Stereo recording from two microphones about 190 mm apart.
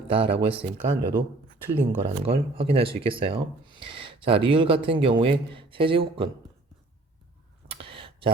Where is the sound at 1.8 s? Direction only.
10° right (ahead or behind).